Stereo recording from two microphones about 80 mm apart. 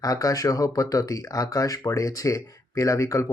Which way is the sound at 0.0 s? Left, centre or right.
Left.